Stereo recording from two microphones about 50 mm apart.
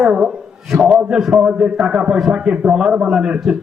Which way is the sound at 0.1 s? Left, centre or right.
Centre.